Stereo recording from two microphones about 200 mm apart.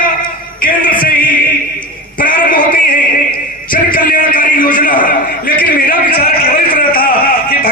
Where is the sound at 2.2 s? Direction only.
45° left (ahead or behind).